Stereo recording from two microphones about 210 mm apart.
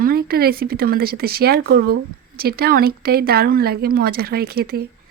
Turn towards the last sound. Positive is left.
turn(degrees=-45)  # may be behind; listen again after turning